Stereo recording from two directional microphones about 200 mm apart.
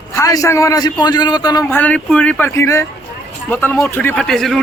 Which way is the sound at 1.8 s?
5° left (ahead or behind).